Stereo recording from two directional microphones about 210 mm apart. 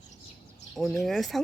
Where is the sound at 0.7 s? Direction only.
Centre (ahead or behind).